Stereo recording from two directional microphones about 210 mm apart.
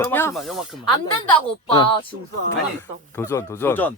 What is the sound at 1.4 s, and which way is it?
A man's voice, 25° left (ahead or behind).